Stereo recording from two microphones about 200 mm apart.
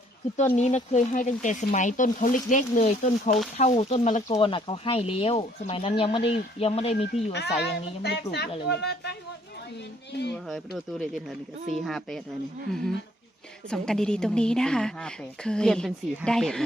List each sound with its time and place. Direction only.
0.3 s speech: 35° left (ahead or behind)
7.3 s a woman's voice: 55° left (ahead or behind)
10.3 s a woman's voice: centre (ahead or behind)